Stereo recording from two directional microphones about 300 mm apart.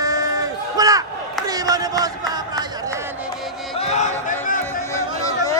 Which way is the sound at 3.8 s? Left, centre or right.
Left.